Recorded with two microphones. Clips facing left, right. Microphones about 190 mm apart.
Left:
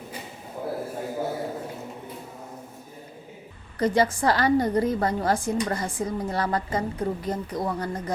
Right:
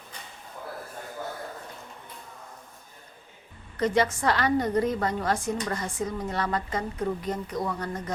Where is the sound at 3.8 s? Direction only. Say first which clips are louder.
Left 2 dB; 30° left (ahead or behind).